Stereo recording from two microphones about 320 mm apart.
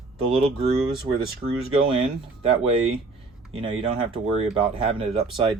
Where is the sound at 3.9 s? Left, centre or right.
Centre.